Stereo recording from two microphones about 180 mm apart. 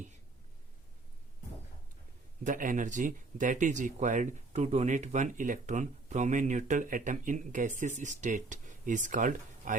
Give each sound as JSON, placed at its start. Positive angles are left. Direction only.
{"t": 2.4, "sound": "speech", "side_deg": -45}